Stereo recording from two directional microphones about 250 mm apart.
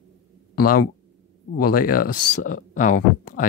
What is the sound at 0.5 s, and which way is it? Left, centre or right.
Speech, left.